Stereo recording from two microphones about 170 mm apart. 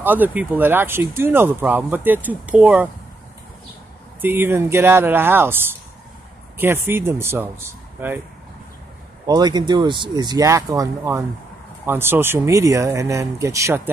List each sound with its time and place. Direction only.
0.0 s speech: 10° right (ahead or behind)
4.2 s speech: 10° right (ahead or behind)
9.2 s speech: 25° right (ahead or behind)